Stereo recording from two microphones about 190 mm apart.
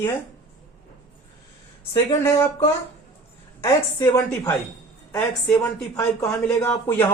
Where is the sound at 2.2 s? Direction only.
15° left (ahead or behind).